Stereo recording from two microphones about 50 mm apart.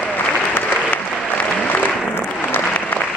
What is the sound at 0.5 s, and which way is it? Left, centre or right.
Applause, left.